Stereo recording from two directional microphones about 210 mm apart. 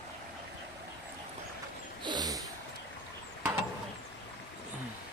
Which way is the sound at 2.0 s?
20° right (ahead or behind).